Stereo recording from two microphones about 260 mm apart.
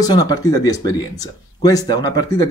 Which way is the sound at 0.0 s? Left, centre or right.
Centre.